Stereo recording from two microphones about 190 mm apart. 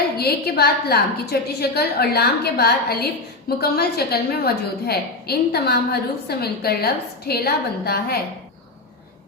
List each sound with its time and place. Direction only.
0.2 s a woman's voice: 55° left (ahead or behind)